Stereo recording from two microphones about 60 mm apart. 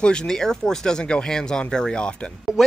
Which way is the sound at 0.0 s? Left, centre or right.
Centre.